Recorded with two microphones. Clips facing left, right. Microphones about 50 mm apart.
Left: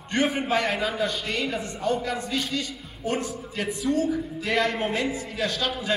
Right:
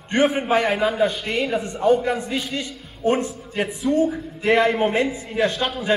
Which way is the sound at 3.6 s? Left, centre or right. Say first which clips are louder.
Right 5 dB; centre.